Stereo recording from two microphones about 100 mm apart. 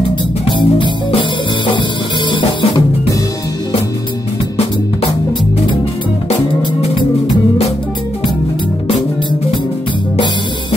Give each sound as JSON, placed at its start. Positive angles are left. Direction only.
{"t": 0.5, "sound": "music", "side_deg": 55}